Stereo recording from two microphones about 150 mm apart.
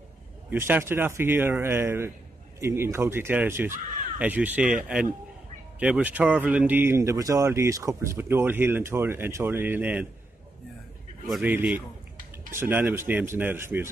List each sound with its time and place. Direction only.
0.5 s speech: 15° right (ahead or behind)
11.4 s speech: 15° right (ahead or behind)